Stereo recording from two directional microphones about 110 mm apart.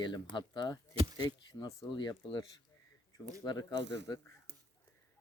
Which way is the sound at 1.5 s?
30° left (ahead or behind).